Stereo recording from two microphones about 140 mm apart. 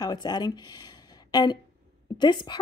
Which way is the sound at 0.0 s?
30° left (ahead or behind).